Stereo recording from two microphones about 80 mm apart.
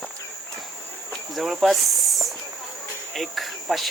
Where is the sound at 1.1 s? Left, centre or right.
Centre.